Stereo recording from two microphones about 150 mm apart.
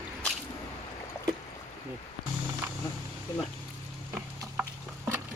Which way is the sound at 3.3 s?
25° left (ahead or behind).